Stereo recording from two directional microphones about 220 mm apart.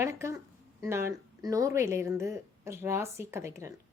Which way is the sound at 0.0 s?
10° right (ahead or behind).